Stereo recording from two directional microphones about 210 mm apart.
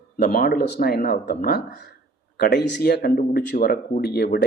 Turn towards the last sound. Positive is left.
turn(degrees=50)  # may be behind; listen again after turning